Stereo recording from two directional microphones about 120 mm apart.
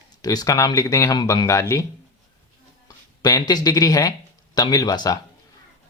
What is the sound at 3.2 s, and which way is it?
Speech, 35° left (ahead or behind).